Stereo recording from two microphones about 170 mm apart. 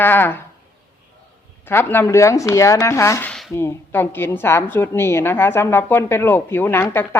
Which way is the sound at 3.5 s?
15° left (ahead or behind).